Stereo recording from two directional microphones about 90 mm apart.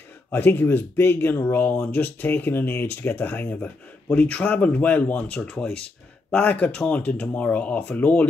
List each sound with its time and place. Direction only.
0.3 s speech: 25° left (ahead or behind)